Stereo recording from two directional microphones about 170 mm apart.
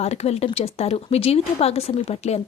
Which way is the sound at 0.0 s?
40° left (ahead or behind).